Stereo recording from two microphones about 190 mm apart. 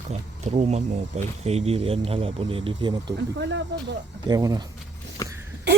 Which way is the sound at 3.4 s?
70° right (ahead or behind).